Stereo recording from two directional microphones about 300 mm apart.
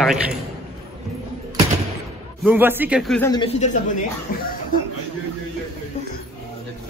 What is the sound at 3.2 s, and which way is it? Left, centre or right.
Speech, centre.